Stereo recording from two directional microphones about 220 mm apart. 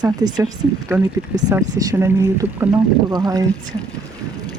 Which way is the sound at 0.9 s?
5° right (ahead or behind).